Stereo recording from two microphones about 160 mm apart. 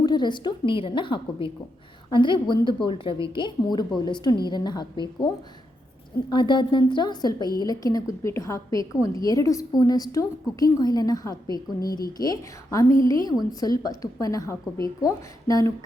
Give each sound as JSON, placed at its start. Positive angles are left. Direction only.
{"t": 0.0, "sound": "a woman's voice", "side_deg": 25}
{"t": 6.3, "sound": "a woman's voice", "side_deg": 30}
{"t": 11.8, "sound": "speech", "side_deg": 65}
{"t": 12.1, "sound": "a woman's voice", "side_deg": 25}